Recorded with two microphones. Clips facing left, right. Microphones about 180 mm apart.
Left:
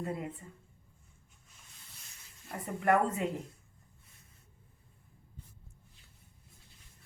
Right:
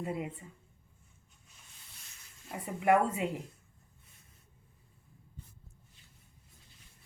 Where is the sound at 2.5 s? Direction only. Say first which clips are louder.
Right 1 dB; 10° right (ahead or behind).